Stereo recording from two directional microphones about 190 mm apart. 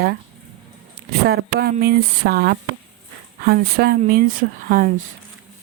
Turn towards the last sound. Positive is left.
turn(degrees=-45)  # may be behind; listen again after turning